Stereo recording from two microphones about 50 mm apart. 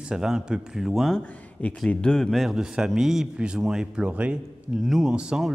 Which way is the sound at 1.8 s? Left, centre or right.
Centre.